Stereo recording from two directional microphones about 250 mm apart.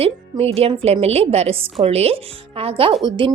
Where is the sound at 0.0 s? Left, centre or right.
Right.